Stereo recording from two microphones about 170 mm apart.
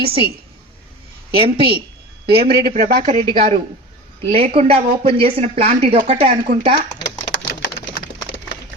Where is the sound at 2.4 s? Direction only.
55° right (ahead or behind).